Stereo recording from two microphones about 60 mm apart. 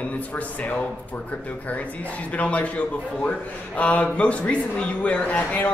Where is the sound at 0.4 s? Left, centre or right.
Left.